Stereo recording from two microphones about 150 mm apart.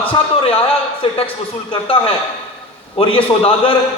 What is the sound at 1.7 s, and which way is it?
A man's voice, 40° left (ahead or behind).